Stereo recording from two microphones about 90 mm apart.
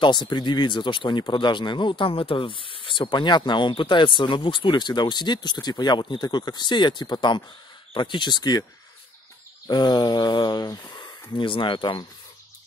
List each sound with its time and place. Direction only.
0.0 s speech: 55° left (ahead or behind)
9.7 s speech: 55° left (ahead or behind)